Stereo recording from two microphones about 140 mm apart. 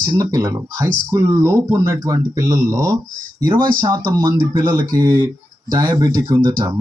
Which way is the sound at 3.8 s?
35° right (ahead or behind).